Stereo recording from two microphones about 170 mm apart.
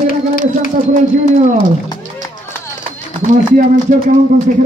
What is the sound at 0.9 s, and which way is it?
Speech, 45° right (ahead or behind).